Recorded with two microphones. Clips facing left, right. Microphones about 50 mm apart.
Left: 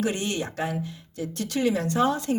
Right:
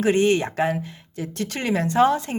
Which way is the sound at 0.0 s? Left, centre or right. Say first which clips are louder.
Right 9 dB; right.